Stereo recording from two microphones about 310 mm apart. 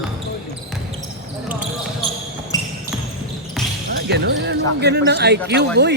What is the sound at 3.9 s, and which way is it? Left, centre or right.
Speech, right.